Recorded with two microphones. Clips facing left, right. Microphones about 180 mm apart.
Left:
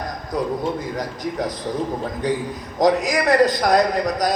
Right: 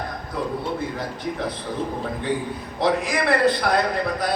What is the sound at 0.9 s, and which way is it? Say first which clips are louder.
Speech: left 3 dB; 40° left (ahead or behind).